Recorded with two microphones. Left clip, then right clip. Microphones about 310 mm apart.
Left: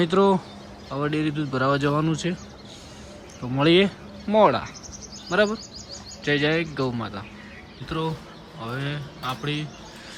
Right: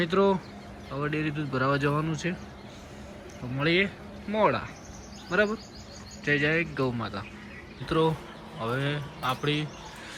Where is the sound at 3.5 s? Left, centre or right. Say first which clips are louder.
Left 7 dB; centre.